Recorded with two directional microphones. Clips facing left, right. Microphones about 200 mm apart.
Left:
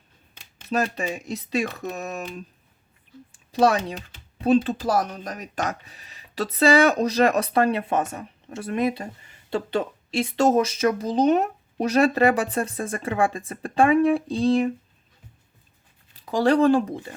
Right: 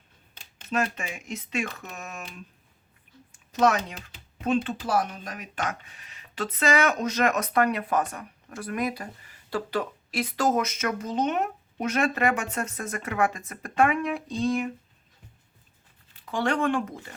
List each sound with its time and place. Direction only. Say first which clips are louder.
0.7 s speech: left 4 dB; 35° left (ahead or behind)
16.1 s speech: left 7 dB; 35° left (ahead or behind)